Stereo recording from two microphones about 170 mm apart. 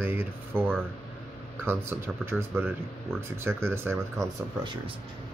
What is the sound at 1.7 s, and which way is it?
Speech, 15° right (ahead or behind).